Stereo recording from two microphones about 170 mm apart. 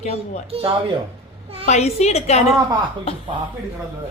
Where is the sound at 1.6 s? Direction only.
40° left (ahead or behind).